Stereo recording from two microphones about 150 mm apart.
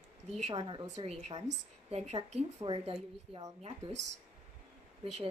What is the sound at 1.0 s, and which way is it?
A woman's voice, 45° right (ahead or behind).